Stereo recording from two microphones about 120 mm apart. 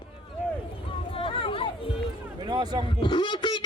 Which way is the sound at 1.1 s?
50° left (ahead or behind).